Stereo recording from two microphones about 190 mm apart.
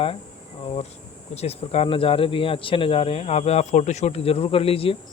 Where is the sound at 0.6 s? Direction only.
30° left (ahead or behind).